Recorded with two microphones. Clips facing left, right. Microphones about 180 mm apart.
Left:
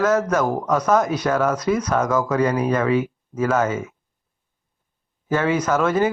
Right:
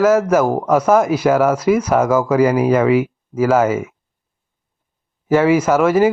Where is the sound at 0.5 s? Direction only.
25° right (ahead or behind).